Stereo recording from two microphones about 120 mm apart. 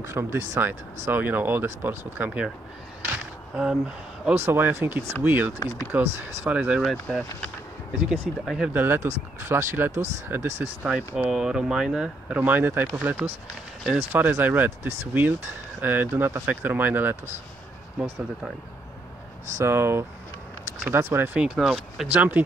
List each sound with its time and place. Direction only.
0.0 s speech: 20° right (ahead or behind)
3.5 s speech: 10° right (ahead or behind)
6.8 s speech: centre (ahead or behind)
8.7 s speech: 20° right (ahead or behind)
11.1 s speech: 5° right (ahead or behind)
19.5 s speech: 20° right (ahead or behind)
21.4 s speech: 5° right (ahead or behind)